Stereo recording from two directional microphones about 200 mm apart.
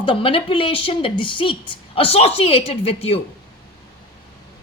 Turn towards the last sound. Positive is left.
turn(degrees=30)  # may be behind; listen again after turning